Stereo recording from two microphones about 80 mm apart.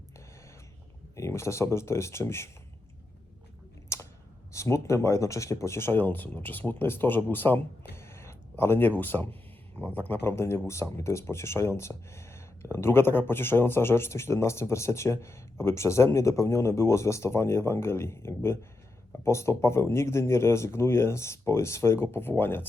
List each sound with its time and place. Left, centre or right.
1.1 s speech: left
3.9 s a sound: left
4.5 s speech: left